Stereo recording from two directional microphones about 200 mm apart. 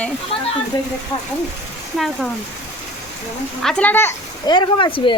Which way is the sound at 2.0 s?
Centre (ahead or behind).